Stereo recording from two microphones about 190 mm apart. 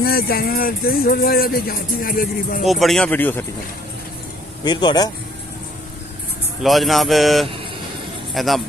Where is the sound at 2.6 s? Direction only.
Centre (ahead or behind).